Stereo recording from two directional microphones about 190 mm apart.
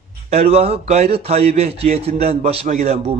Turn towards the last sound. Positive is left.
turn(degrees=-35)  # may be behind; listen again after turning